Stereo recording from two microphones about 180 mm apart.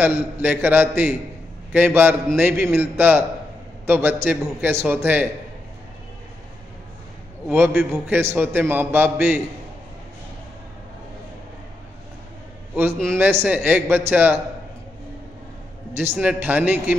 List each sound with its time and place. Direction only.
0.0 s a man's voice: 10° right (ahead or behind)
7.4 s a man's voice: 5° right (ahead or behind)
13.2 s a man's voice: 10° right (ahead or behind)
16.2 s a man's voice: 10° right (ahead or behind)